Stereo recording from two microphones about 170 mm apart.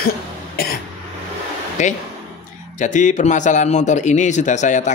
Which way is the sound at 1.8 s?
45° left (ahead or behind).